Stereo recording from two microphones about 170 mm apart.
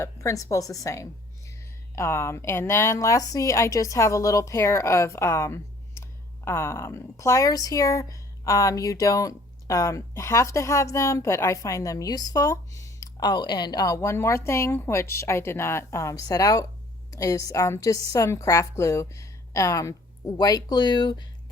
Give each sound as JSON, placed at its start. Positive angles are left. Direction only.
{"t": 0.0, "sound": "a woman's voice", "side_deg": 20}